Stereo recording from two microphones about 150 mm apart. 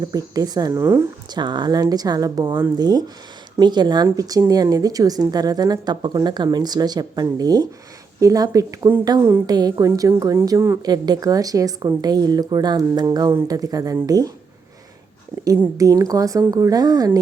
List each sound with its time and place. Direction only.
0.1 s a woman's voice: 25° right (ahead or behind)
1.3 s a woman's voice: 30° right (ahead or behind)
15.4 s a woman's voice: 20° right (ahead or behind)